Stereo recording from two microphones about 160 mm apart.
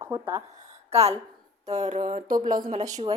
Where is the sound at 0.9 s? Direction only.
40° right (ahead or behind).